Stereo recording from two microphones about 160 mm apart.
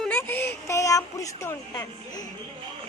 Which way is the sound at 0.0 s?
10° left (ahead or behind).